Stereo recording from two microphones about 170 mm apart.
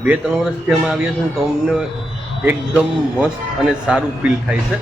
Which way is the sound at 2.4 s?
5° right (ahead or behind).